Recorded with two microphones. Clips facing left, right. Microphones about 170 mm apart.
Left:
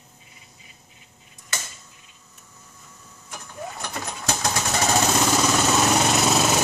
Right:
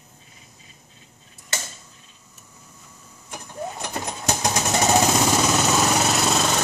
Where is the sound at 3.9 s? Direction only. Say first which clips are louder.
Right 2 dB; 20° right (ahead or behind).